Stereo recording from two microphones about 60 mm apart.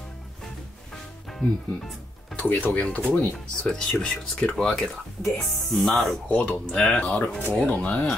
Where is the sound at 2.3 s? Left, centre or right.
Left; by 6.1 s centre.